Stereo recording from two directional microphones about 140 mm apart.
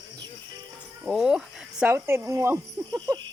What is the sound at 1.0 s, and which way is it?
Speech, 5° right (ahead or behind).